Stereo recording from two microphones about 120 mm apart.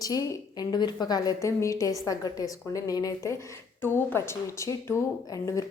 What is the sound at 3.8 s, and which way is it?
A woman's voice, 20° left (ahead or behind).